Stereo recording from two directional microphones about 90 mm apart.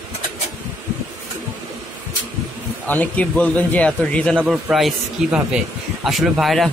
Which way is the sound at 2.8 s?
20° left (ahead or behind).